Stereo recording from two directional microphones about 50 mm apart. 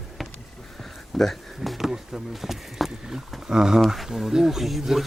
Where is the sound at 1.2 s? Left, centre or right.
Centre.